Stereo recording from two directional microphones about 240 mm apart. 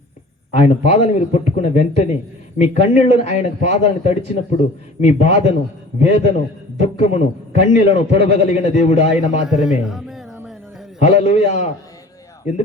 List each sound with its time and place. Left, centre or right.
0.5 s a man's voice: left
9.5 s a man's voice: centre
11.0 s a man's voice: left